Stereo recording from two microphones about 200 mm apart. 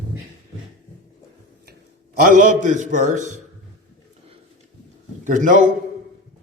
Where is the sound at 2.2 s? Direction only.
40° right (ahead or behind).